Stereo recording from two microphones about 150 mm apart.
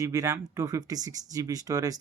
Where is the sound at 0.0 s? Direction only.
20° right (ahead or behind).